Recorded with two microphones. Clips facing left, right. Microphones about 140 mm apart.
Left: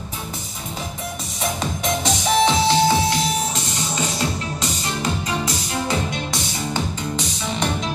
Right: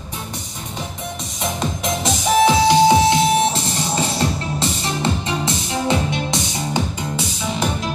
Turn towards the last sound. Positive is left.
turn(degrees=-5)  # may be behind; listen again after turning